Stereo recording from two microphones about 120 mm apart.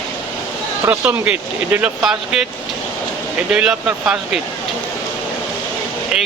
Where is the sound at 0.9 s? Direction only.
10° right (ahead or behind).